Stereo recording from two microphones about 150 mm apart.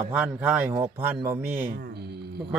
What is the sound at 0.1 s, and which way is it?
Speech, 10° right (ahead or behind).